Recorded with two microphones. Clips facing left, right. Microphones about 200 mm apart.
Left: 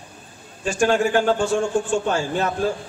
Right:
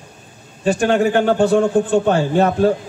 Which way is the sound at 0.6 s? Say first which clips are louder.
Right 4 dB; 60° right (ahead or behind).